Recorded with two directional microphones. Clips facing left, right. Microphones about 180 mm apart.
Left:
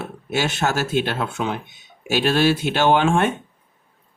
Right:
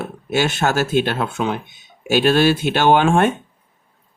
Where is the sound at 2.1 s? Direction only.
50° right (ahead or behind).